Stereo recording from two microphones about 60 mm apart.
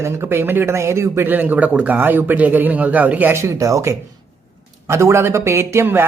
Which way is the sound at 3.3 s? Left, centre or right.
Right.